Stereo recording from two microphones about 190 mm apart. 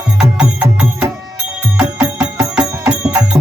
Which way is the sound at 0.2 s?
5° right (ahead or behind).